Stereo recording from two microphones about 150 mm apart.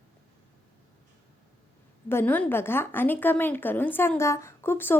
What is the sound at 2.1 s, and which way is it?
A woman's voice, 15° left (ahead or behind).